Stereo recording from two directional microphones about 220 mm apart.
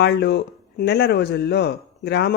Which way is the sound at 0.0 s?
50° left (ahead or behind).